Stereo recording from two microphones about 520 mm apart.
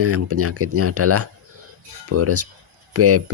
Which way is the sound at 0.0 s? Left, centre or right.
Right.